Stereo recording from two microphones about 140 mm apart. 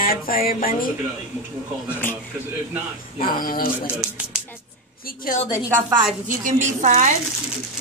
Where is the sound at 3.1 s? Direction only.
90° left.